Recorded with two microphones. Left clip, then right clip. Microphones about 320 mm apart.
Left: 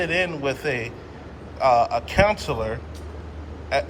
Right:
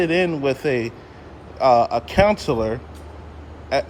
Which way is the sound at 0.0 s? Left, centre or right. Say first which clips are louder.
Right 4 dB; right.